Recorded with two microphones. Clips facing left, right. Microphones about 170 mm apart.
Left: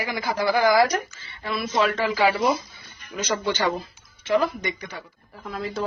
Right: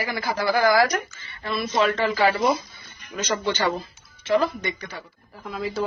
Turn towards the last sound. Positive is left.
turn(degrees=0)  # may be behind; listen again after turning